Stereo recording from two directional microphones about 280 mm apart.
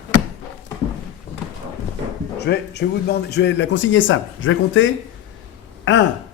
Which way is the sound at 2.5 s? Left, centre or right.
Left.